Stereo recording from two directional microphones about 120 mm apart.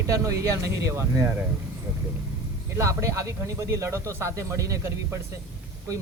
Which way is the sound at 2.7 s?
25° right (ahead or behind).